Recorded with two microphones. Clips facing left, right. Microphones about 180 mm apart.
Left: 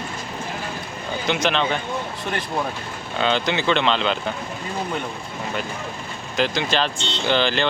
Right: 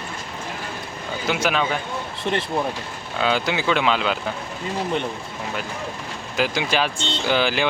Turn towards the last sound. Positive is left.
turn(degrees=-10)  # may be behind; listen again after turning